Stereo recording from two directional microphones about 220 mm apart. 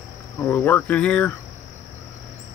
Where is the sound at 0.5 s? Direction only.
10° left (ahead or behind).